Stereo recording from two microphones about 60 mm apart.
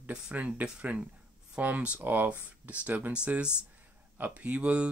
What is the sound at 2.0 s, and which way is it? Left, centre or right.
Speech, right.